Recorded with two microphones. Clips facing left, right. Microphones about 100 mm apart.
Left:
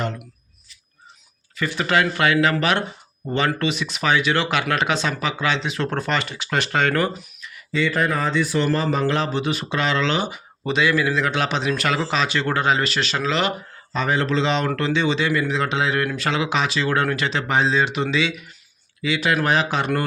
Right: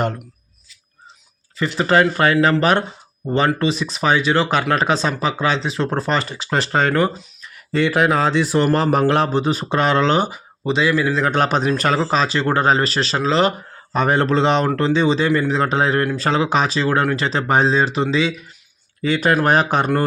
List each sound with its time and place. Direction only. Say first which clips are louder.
0.0 s speech: right 5 dB; 50° right (ahead or behind)
1.5 s speech: right 5 dB; 25° right (ahead or behind)
7.5 s speech: right 4 dB; 55° right (ahead or behind)
9.3 s speech: right 5 dB; 40° right (ahead or behind)
10.7 s speech: right 2 dB; 30° right (ahead or behind)
11.3 s speech: right 5 dB; 45° right (ahead or behind)
11.7 s speech: right 4 dB; 35° right (ahead or behind)
13.9 s speech: right 4 dB; 50° right (ahead or behind)
14.7 s speech: right 4 dB; 35° right (ahead or behind)
19.0 s speech: right 4 dB; 45° right (ahead or behind)